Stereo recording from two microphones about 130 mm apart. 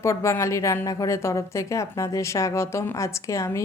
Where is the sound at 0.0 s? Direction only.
20° left (ahead or behind).